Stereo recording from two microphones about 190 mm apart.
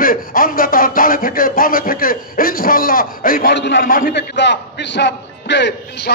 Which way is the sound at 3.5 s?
65° left (ahead or behind).